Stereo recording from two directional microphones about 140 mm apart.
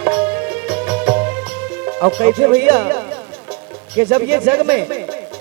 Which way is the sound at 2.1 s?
10° right (ahead or behind).